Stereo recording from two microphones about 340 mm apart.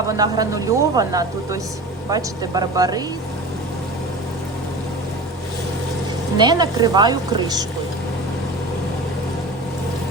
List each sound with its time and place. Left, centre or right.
0.2 s speech: centre
6.3 s speech: centre